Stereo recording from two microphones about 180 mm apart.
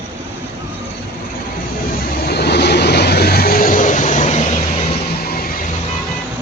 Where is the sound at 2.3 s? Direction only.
65° left (ahead or behind); by 4.9 s 35° left (ahead or behind).